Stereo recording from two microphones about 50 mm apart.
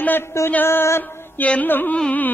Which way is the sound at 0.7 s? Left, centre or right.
Left.